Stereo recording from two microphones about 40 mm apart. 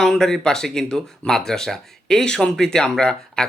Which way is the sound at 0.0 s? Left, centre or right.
Centre.